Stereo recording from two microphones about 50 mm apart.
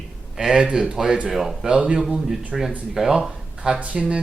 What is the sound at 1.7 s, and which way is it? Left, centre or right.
Speech, right.